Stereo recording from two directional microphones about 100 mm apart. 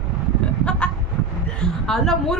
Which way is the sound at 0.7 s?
10° left (ahead or behind).